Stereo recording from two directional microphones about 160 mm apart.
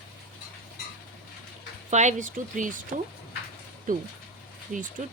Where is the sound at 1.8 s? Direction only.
45° right (ahead or behind).